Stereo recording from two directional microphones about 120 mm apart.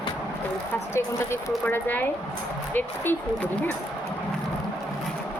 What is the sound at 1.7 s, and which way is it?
A woman's voice, 15° left (ahead or behind).